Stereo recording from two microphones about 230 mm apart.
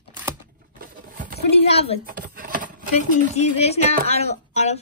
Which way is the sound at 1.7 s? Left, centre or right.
Left.